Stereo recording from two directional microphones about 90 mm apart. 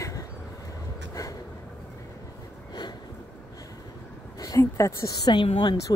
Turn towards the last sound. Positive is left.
turn(degrees=55)  # may be behind; listen again after turning